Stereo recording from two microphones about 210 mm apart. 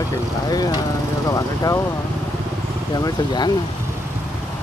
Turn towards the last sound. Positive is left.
turn(degrees=20)  # may be behind; listen again after turning